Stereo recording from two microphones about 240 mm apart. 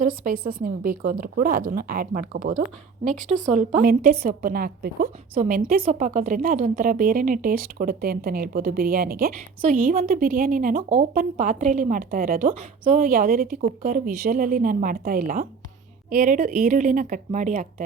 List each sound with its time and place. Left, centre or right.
0.0 s a woman's voice: right
3.8 s a woman's voice: right